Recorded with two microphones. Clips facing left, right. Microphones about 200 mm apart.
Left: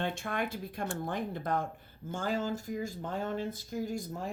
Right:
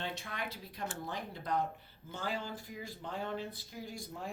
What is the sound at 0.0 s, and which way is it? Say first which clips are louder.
Speech: left 7 dB; 50° left (ahead or behind).